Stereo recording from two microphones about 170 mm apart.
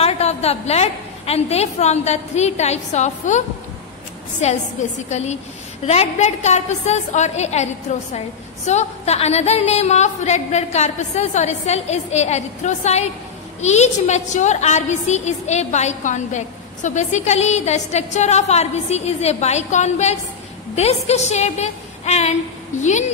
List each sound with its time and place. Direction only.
0.0 s a woman's voice: 40° left (ahead or behind)